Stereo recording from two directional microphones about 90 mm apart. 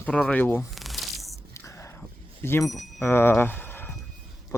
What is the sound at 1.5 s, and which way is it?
Whispering, 35° left (ahead or behind).